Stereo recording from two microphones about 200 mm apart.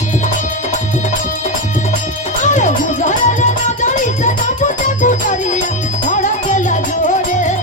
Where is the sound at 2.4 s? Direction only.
40° left (ahead or behind).